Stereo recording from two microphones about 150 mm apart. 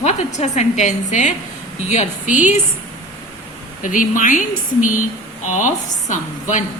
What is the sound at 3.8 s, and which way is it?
A woman's voice, 60° left (ahead or behind).